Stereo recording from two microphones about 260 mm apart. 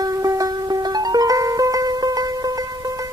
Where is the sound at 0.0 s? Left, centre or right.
Centre.